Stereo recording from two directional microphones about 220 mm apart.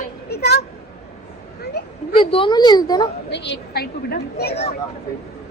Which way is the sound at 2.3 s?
20° left (ahead or behind).